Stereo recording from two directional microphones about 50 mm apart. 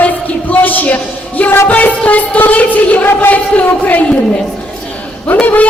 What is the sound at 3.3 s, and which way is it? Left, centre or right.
Speech, left.